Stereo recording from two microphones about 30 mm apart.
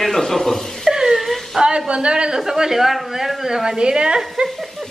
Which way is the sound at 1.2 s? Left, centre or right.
Centre.